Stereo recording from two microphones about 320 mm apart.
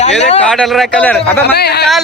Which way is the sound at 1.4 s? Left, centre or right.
Left.